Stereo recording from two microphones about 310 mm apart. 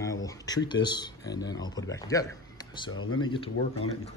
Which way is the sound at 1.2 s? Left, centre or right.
Left.